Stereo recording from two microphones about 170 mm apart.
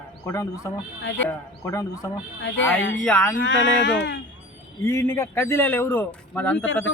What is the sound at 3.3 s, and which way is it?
Speech, 90° left.